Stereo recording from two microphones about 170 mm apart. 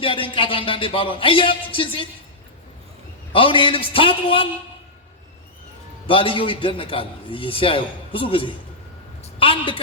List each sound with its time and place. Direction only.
0.0 s a man's voice: 30° left (ahead or behind)
3.3 s a man's voice: 30° left (ahead or behind)
6.1 s a man's voice: 30° left (ahead or behind)